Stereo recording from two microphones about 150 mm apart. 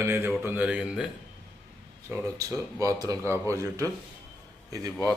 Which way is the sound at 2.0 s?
20° right (ahead or behind).